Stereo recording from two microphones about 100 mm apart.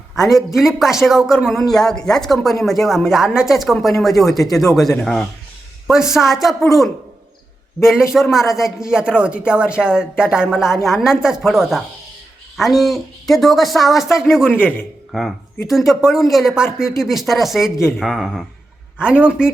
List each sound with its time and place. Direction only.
0.2 s a man's voice: centre (ahead or behind)